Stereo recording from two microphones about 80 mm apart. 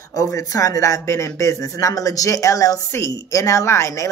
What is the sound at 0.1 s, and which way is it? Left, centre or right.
A woman's voice, left.